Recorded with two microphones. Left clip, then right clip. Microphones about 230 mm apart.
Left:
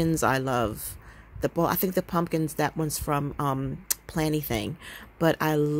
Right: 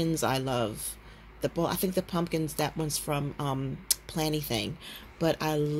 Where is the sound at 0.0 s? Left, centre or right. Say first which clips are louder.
Left 4 dB; left.